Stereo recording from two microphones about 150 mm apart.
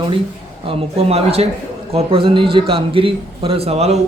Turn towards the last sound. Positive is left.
turn(degrees=-45)  # may be behind; listen again after turning